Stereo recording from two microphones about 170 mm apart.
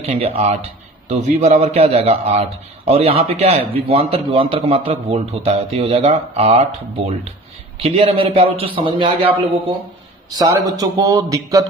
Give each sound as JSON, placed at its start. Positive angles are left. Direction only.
{"t": 0.0, "sound": "a man's voice", "side_deg": -40}
{"t": 10.3, "sound": "a man's voice", "side_deg": -20}